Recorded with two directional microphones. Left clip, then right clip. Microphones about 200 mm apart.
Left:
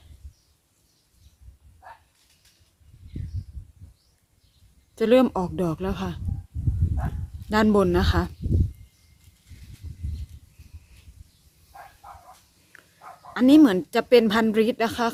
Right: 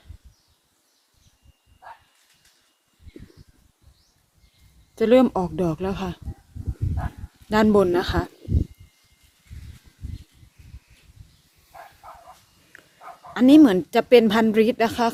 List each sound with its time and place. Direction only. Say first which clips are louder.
4.9 s a woman's voice: right 2 dB; centre (ahead or behind)
7.5 s a woman's voice: right 2 dB; centre (ahead or behind)
12.0 s bow-wow: right 1 dB; 40° right (ahead or behind)
13.3 s a woman's voice: right 2 dB; centre (ahead or behind)